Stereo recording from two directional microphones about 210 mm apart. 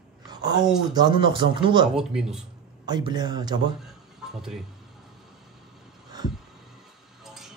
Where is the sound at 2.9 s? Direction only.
20° right (ahead or behind).